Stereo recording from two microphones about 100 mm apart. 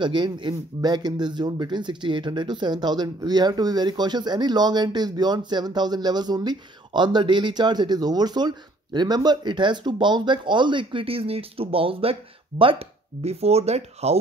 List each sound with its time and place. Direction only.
0.0 s speech: 50° right (ahead or behind); by 14.1 s 90° right